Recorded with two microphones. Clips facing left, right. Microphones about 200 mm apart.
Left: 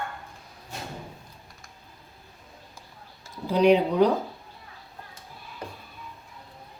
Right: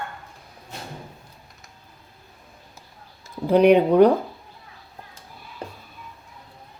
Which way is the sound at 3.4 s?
55° right (ahead or behind).